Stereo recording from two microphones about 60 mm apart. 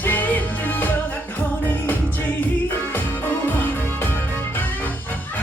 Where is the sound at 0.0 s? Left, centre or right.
Left.